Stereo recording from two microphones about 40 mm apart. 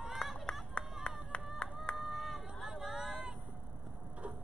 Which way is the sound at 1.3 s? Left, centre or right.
Left.